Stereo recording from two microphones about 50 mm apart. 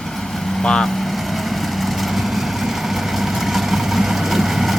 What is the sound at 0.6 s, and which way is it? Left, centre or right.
Vehicle, centre.